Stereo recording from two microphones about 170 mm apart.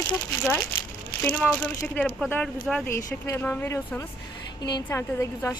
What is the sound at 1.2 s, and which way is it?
A woman's voice, 5° left (ahead or behind).